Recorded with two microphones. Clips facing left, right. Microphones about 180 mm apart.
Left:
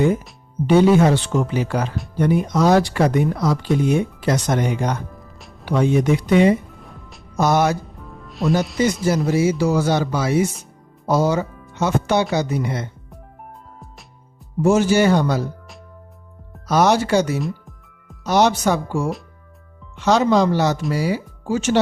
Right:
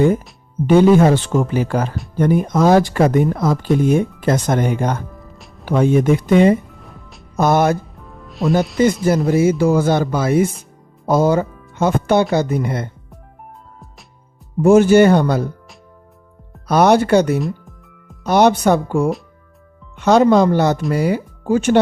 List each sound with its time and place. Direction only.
0.7 s speech: 50° right (ahead or behind)
7.9 s music: centre (ahead or behind)
9.0 s speech: 50° right (ahead or behind)
14.6 s speech: 55° right (ahead or behind)
16.6 s speech: 55° right (ahead or behind)
17.4 s music: centre (ahead or behind)
18.2 s speech: 55° right (ahead or behind)